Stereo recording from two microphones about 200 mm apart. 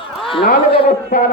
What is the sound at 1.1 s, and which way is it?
Speech, 40° left (ahead or behind).